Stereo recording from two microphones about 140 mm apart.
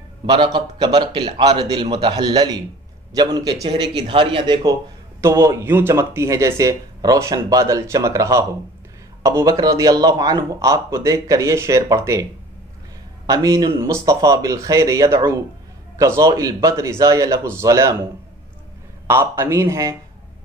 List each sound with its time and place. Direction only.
0.3 s a man's voice: 30° right (ahead or behind)
5.2 s speech: 20° right (ahead or behind)
13.3 s speech: 25° right (ahead or behind)
19.0 s speech: 20° right (ahead or behind)